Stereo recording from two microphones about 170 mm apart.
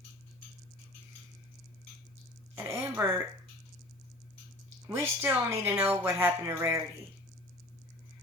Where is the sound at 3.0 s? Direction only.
20° right (ahead or behind).